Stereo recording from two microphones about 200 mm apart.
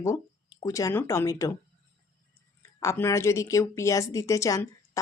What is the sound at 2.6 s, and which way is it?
Speech, 15° left (ahead or behind).